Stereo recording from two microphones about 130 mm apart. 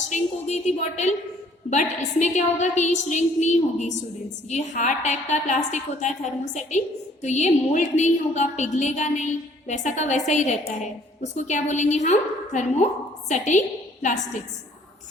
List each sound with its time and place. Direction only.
0.1 s a woman's voice: 60° left (ahead or behind)